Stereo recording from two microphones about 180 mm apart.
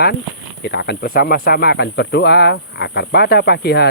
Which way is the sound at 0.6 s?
65° left (ahead or behind).